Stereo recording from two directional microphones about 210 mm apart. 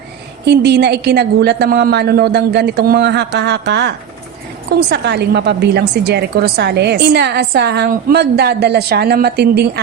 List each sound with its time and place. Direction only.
0.4 s a woman's voice: 50° right (ahead or behind)